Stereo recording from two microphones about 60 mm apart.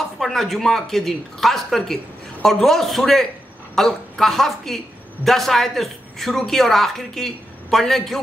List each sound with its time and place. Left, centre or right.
0.2 s a woman's voice: centre